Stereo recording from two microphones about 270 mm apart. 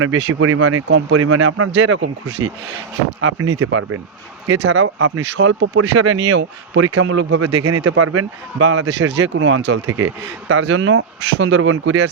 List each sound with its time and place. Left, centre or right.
0.0 s a man's voice: right
7.4 s a man's voice: right